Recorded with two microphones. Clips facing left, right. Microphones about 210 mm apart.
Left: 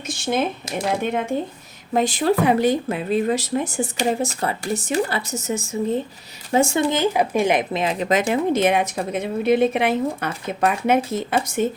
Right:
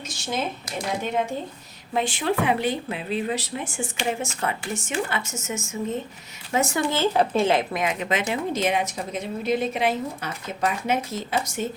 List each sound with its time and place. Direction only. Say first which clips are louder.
0.9 s a woman's voice: left 4 dB; 60° left (ahead or behind)
1.9 s speech: left 5 dB; 40° left (ahead or behind)
6.9 s speech: left 2 dB; 15° left (ahead or behind)
7.7 s a woman's voice: left 5 dB; 30° left (ahead or behind); by 11.6 s 55° left (ahead or behind)